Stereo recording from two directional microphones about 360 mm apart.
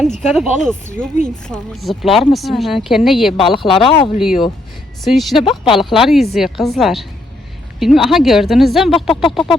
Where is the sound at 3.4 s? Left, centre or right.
Centre.